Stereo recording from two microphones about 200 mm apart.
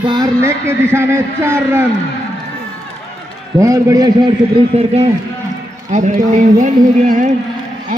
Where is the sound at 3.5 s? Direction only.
15° right (ahead or behind); by 7.4 s 40° right (ahead or behind).